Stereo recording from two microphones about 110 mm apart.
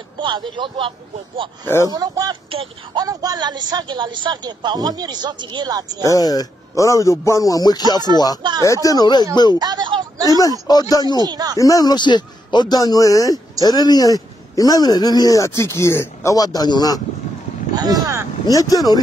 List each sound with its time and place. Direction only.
0.2 s a man's voice: 50° right (ahead or behind)
1.9 s a man's voice: 35° right (ahead or behind)
2.5 s a man's voice: 55° right (ahead or behind)
3.0 s a man's voice: 35° right (ahead or behind)
6.1 s speech: 35° left (ahead or behind)
8.4 s a man's voice: 40° right (ahead or behind)
8.8 s speech: 40° left (ahead or behind)
9.6 s speech: 40° right (ahead or behind)
10.7 s speech: 35° left (ahead or behind)
11.2 s a man's voice: 40° right (ahead or behind)
11.5 s speech: 30° left (ahead or behind)
17.7 s a man's voice: 35° right (ahead or behind)
18.5 s speech: 30° left (ahead or behind)